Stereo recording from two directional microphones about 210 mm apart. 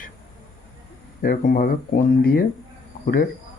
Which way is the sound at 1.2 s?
40° left (ahead or behind).